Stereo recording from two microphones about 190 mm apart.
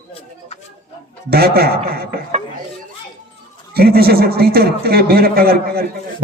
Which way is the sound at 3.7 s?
55° right (ahead or behind).